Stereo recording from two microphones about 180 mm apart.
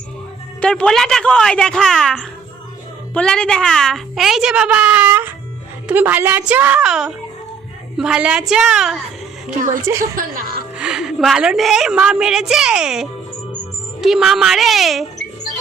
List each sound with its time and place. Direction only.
0.6 s a woman's voice: 5° left (ahead or behind)
9.6 s a woman's voice: 45° right (ahead or behind)
10.8 s a woman's voice: 5° right (ahead or behind)